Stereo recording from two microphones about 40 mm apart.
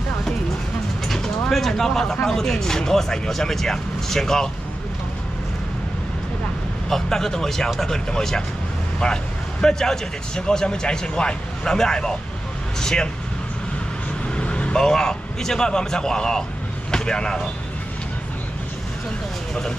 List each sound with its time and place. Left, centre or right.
1.0 s bird: centre
2.2 s speech: centre
6.9 s speech: centre
14.3 s vehicle: left
14.8 s speech: centre